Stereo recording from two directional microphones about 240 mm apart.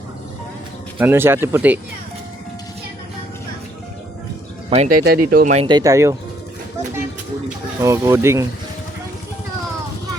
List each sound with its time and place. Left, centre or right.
0.9 s speech: centre
4.7 s speech: right
5.6 s speech: centre
7.8 s speech: centre